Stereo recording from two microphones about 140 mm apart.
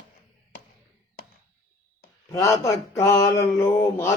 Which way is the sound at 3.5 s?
20° left (ahead or behind).